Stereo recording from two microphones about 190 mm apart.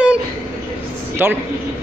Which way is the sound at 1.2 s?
10° right (ahead or behind).